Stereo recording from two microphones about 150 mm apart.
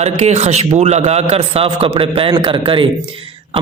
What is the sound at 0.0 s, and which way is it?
A man's voice, 45° right (ahead or behind).